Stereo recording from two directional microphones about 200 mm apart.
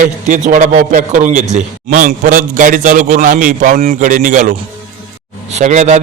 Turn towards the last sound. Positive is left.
turn(degrees=-35)  # may be behind; listen again after turning